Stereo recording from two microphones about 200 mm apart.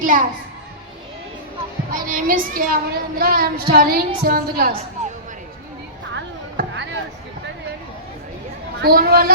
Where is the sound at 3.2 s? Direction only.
50° right (ahead or behind).